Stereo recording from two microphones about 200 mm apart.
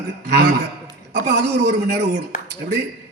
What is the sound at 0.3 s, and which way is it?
A man's voice, 55° right (ahead or behind).